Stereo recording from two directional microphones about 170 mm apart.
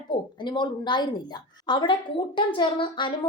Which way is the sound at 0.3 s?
25° left (ahead or behind).